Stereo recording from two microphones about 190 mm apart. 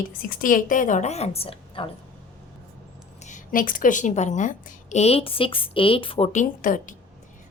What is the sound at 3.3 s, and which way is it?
A woman's voice, 45° left (ahead or behind).